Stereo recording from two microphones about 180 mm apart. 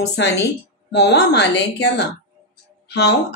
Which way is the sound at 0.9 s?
70° left (ahead or behind).